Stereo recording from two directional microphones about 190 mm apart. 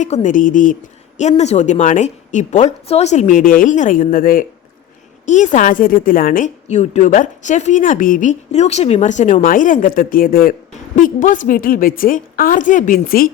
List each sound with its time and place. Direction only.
0.0 s a woman's voice: 40° left (ahead or behind)